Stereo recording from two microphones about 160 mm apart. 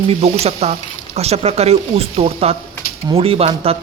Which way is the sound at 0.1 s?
40° right (ahead or behind).